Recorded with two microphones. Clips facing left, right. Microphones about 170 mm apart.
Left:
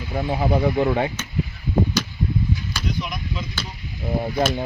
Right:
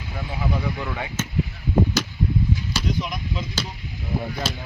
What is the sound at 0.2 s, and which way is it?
Speech, 40° left (ahead or behind).